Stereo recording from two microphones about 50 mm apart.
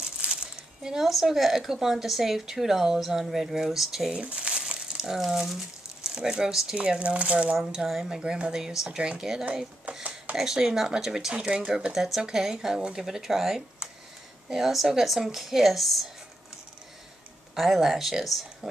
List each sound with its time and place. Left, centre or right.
0.2 s speech: centre
4.2 s crumpling: right
5.1 s speech: centre
6.8 s speech: right
7.8 s speech: centre
9.9 s a sound: right
10.3 s speech: centre
17.6 s speech: centre